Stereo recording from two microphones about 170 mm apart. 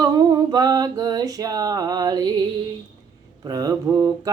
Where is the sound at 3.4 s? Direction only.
20° right (ahead or behind).